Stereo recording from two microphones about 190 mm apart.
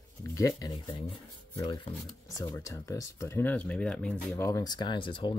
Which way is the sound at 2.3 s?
15° left (ahead or behind).